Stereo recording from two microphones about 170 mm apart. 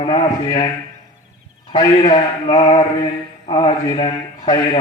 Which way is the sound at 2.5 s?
35° left (ahead or behind).